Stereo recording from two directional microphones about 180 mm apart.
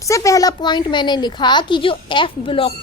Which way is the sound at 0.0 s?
15° left (ahead or behind).